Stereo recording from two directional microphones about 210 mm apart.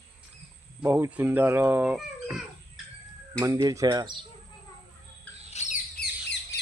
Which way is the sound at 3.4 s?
15° right (ahead or behind).